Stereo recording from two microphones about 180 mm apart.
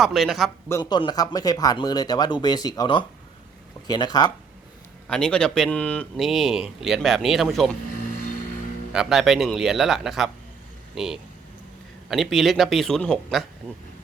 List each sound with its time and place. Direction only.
0.0 s speech: centre (ahead or behind)
0.7 s speech: 25° left (ahead or behind)
5.0 s speech: 5° left (ahead or behind)
8.9 s speech: centre (ahead or behind)